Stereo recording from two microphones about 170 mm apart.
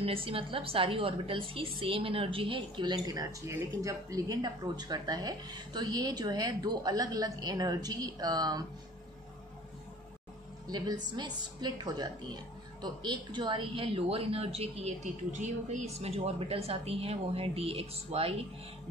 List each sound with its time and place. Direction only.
0.0 s a woman's voice: 35° right (ahead or behind)
11.1 s a woman's voice: 25° right (ahead or behind)